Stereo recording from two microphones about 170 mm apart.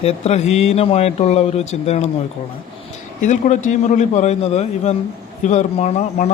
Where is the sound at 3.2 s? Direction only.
45° left (ahead or behind).